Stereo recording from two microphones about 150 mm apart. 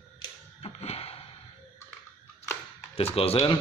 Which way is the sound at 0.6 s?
40° left (ahead or behind).